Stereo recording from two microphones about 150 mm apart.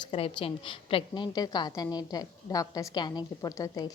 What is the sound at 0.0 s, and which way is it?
A woman's voice, 35° left (ahead or behind).